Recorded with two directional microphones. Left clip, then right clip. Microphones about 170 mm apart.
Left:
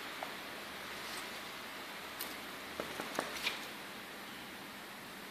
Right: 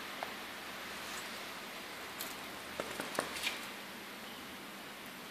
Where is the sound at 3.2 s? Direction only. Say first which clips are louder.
Right 1 dB; 25° right (ahead or behind).